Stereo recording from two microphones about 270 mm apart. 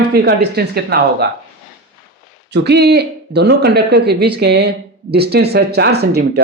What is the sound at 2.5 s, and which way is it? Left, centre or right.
Speech, right.